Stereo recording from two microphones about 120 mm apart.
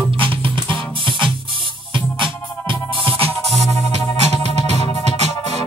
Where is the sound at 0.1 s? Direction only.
45° right (ahead or behind).